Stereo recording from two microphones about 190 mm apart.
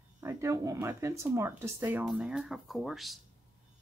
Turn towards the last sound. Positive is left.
turn(degrees=0)  # may be behind; listen again after turning